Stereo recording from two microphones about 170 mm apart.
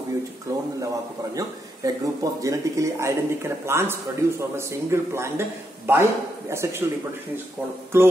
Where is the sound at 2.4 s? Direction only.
20° right (ahead or behind).